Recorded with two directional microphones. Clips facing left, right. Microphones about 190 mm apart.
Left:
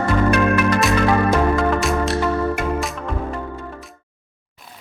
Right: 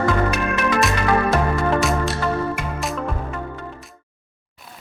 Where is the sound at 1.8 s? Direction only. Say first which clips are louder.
Left 1 dB; centre (ahead or behind).